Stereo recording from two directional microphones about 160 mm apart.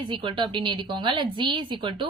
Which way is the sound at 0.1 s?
30° right (ahead or behind).